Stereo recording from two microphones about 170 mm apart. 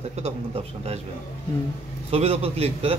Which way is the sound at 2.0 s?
35° right (ahead or behind).